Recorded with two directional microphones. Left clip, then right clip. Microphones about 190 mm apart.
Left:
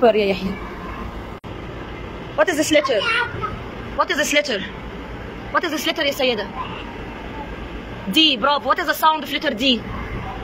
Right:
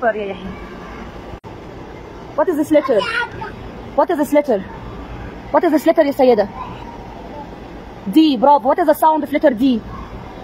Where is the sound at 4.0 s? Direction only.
40° right (ahead or behind).